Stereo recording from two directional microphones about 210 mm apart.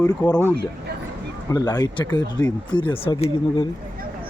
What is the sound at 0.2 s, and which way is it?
Speech, 20° left (ahead or behind).